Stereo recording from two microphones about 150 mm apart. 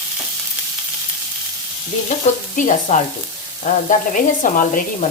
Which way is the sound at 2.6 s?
60° left (ahead or behind).